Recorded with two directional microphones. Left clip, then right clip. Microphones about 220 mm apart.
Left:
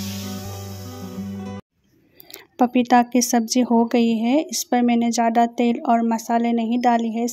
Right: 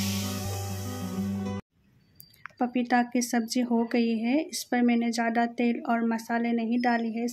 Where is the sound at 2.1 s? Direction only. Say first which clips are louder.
Left 6 dB; 35° left (ahead or behind).